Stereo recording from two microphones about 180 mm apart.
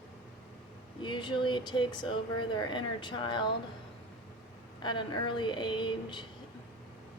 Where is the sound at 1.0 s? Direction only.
25° left (ahead or behind).